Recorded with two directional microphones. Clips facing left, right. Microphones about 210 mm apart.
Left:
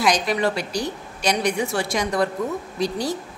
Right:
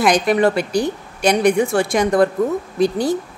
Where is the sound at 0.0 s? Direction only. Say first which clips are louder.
Right 6 dB; 55° right (ahead or behind).